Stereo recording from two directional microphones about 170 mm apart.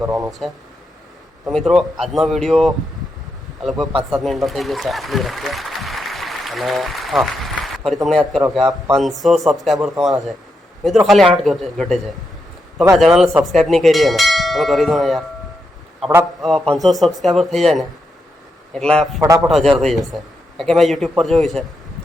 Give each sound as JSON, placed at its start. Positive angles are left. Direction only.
{"t": 0.0, "sound": "speech", "side_deg": -20}
{"t": 0.3, "sound": "a man's voice", "side_deg": 0}
{"t": 13.0, "sound": "a man's voice", "side_deg": 0}
{"t": 16.4, "sound": "a man's voice", "side_deg": 5}